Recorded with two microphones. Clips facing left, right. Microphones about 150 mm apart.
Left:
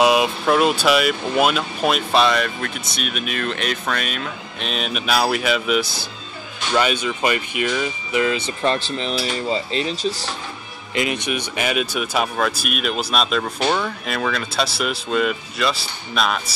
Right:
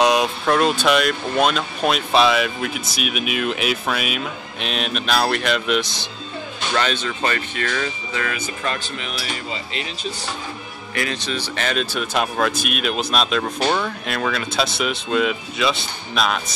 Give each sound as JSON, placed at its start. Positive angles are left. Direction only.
{"t": 0.0, "sound": "speech", "side_deg": 5}
{"t": 11.0, "sound": "speech", "side_deg": 20}